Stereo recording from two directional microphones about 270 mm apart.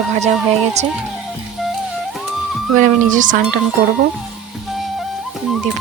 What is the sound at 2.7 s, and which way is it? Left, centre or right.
Speech, right.